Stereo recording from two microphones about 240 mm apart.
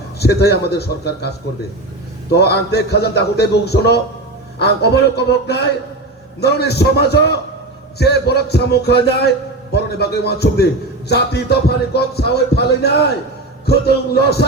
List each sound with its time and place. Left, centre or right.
0.2 s a man's voice: left
2.3 s a man's voice: left